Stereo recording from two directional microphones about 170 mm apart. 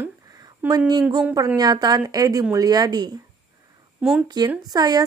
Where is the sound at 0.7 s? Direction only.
25° right (ahead or behind).